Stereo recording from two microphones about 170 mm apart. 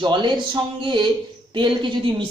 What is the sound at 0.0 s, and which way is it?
Speech, 25° right (ahead or behind).